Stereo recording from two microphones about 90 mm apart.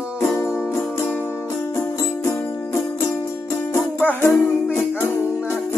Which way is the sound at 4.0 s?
20° left (ahead or behind).